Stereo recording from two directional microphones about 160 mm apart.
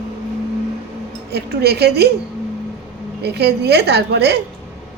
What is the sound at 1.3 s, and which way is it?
Speech, 90° right.